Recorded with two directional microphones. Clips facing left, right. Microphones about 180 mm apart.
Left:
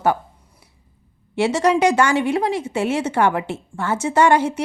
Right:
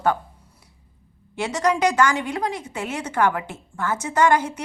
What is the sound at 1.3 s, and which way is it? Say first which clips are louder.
A woman's voice: left 5 dB; 25° left (ahead or behind).